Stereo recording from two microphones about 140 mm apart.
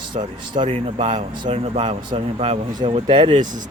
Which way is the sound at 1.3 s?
40° right (ahead or behind).